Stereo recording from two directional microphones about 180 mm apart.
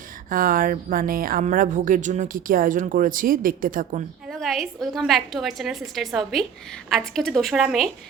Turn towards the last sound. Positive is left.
turn(degrees=0)  # may be behind; listen again after turning